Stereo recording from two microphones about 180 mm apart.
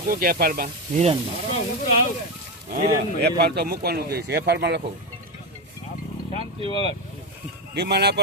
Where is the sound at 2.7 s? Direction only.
60° right (ahead or behind).